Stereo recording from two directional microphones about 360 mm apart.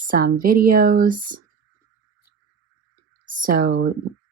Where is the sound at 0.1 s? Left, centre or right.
Right.